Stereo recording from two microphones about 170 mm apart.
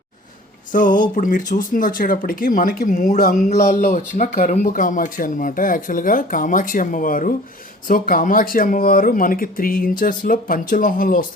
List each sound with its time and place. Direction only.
0.7 s speech: 50° left (ahead or behind)